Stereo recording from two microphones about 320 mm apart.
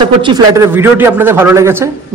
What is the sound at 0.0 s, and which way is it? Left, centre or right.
A man's voice, centre.